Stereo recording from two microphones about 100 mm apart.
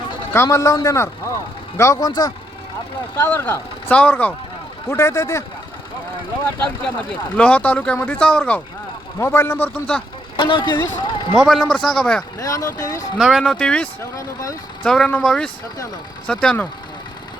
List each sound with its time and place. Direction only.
0.3 s a man's voice: 30° left (ahead or behind)
3.2 s speech: 20° left (ahead or behind)
4.9 s a man's voice: 30° left (ahead or behind)
7.3 s speech: 15° left (ahead or behind)
9.1 s speech: 25° left (ahead or behind)
10.3 s a man's voice: 55° left (ahead or behind)
11.3 s speech: centre (ahead or behind)
12.4 s a man's voice: 35° left (ahead or behind)
13.1 s speech: 5° right (ahead or behind)
13.4 s speech: 10° left (ahead or behind)
14.0 s a man's voice: 30° left (ahead or behind)
14.8 s speech: 5° left (ahead or behind)